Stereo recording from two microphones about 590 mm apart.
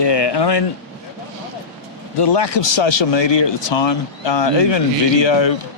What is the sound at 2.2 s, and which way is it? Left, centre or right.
Speech, left.